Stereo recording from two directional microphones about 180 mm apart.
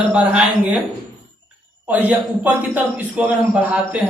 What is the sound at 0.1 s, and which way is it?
Speech, 10° right (ahead or behind).